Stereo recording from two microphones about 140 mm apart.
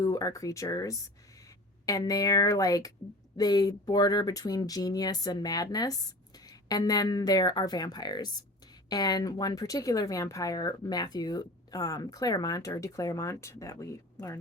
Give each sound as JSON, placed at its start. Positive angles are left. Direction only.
{"t": 0.0, "sound": "speech", "side_deg": 25}